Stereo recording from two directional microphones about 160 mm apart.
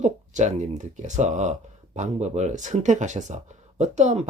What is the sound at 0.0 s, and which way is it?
Speech, 50° right (ahead or behind).